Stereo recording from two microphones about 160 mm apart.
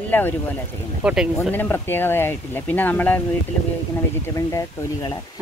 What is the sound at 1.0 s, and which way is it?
Speech, 5° right (ahead or behind).